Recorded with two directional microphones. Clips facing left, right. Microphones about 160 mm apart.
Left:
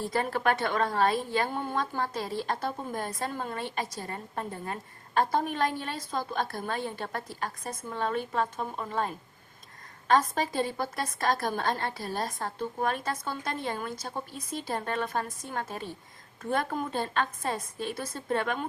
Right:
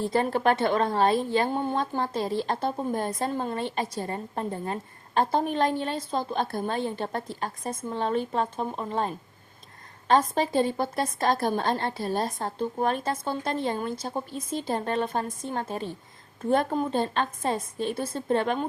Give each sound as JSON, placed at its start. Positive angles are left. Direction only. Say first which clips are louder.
{"t": 0.0, "sound": "a woman's voice", "louder": "right 4 dB", "side_deg": -25}